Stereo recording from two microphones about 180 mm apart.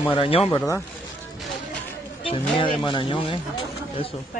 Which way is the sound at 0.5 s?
15° left (ahead or behind).